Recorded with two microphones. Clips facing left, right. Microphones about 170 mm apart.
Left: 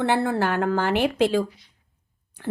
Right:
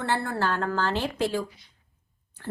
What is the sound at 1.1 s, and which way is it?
Speech, 90° left.